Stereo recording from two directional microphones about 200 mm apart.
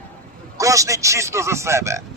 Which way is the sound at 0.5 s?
15° right (ahead or behind).